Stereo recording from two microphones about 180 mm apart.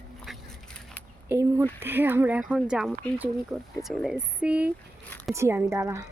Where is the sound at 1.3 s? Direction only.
15° right (ahead or behind).